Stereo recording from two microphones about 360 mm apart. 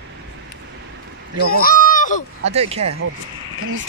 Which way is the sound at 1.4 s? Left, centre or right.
Left.